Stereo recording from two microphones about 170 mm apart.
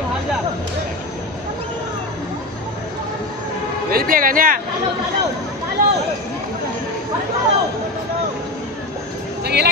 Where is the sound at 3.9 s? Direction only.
60° right (ahead or behind).